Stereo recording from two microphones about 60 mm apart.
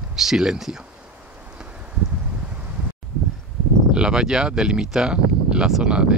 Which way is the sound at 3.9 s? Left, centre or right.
Centre.